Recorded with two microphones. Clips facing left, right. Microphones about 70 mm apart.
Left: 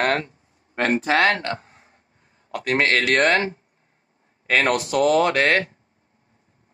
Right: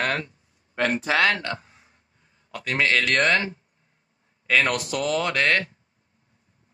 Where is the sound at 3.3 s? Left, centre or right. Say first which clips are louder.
Left 3 dB; left.